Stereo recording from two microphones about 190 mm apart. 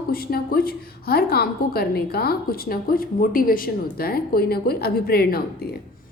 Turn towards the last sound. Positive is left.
turn(degrees=55)  # may be behind; listen again after turning